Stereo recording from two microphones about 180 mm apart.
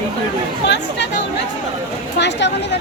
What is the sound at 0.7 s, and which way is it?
Speech, 75° left (ahead or behind).